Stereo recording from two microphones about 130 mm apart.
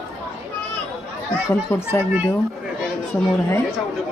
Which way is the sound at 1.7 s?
15° left (ahead or behind).